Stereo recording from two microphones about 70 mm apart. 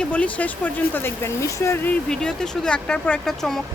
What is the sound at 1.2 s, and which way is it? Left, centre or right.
Speech, left.